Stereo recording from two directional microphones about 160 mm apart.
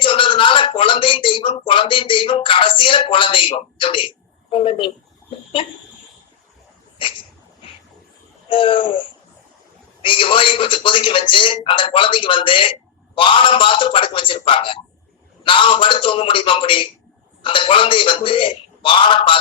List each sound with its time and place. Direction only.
0.0 s speech: 30° left (ahead or behind)
7.0 s speech: 30° left (ahead or behind)
8.4 s speech: 30° left (ahead or behind)
10.0 s speech: 30° left (ahead or behind)